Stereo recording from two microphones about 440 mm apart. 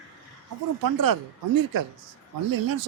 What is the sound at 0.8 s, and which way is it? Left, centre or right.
Speech, right.